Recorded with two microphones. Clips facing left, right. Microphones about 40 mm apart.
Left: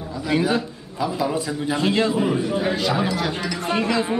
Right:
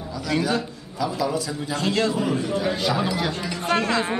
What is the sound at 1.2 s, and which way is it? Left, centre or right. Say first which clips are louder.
A man's voice: left 2 dB; left.